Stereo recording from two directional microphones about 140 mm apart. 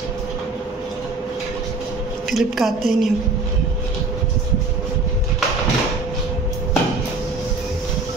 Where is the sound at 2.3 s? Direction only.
Centre (ahead or behind).